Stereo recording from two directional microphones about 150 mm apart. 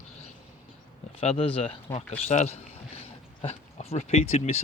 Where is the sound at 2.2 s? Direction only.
50° left (ahead or behind).